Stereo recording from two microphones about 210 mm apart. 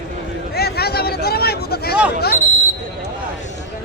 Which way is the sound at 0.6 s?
50° left (ahead or behind).